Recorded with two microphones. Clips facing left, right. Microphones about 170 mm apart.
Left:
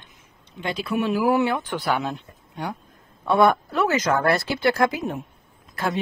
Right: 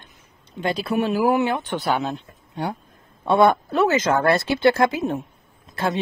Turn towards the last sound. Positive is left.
turn(degrees=-25)  # may be behind; listen again after turning